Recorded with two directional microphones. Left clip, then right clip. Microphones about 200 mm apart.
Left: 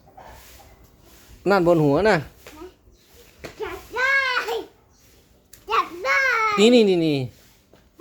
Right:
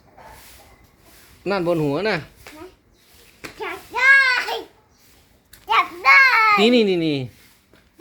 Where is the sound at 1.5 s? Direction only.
20° left (ahead or behind).